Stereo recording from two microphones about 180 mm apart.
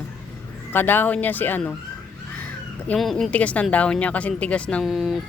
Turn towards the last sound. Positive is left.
turn(degrees=0)  # may be behind; listen again after turning